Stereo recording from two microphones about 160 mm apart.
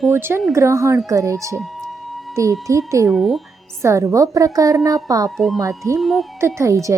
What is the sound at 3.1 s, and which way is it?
Speech, centre (ahead or behind).